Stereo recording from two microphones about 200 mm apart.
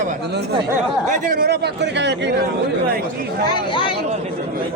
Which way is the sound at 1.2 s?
45° right (ahead or behind).